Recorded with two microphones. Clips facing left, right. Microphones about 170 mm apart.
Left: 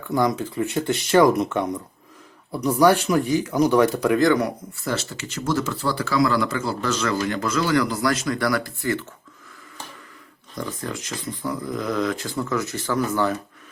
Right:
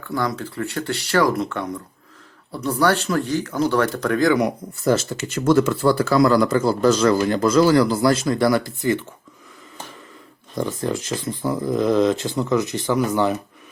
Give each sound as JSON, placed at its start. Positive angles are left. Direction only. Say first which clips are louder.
{"t": 0.1, "sound": "speech", "louder": "left 3 dB", "side_deg": 20}
{"t": 4.8, "sound": "speech", "louder": "right 8 dB", "side_deg": -45}
{"t": 10.6, "sound": "speech", "louder": "right 6 dB", "side_deg": -25}